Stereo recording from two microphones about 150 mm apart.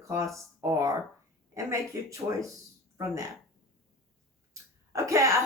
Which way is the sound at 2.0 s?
20° right (ahead or behind).